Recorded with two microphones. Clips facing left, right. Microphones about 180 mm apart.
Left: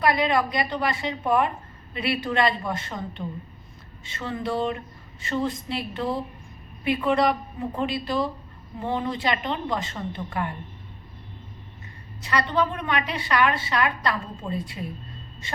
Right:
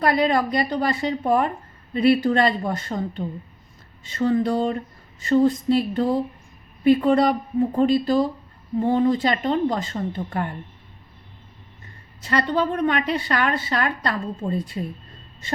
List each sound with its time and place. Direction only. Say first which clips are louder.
0.0 s a woman's voice: right 2 dB; 40° right (ahead or behind)
12.2 s a woman's voice: right 2 dB; 45° right (ahead or behind)